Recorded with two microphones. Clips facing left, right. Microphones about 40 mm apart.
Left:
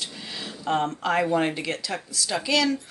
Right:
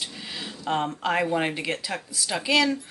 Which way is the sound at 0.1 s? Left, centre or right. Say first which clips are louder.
Even; centre.